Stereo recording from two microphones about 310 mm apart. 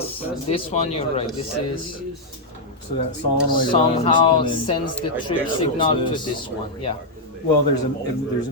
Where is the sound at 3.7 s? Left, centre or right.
Centre.